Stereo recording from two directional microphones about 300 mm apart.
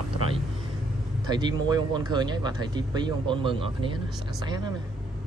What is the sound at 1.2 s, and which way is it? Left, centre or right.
Speech, centre.